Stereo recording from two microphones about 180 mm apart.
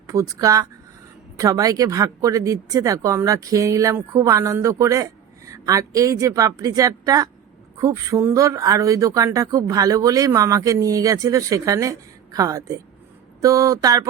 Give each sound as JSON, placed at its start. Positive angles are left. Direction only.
{"t": 0.1, "sound": "speech", "side_deg": -20}